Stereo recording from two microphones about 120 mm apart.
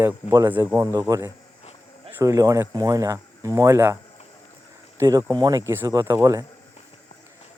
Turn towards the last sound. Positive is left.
turn(degrees=-25)  # may be behind; listen again after turning